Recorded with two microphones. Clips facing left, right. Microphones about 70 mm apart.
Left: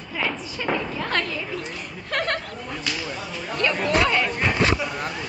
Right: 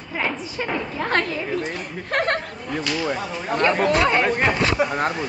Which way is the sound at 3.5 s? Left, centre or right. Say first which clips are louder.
Right 5 dB; right.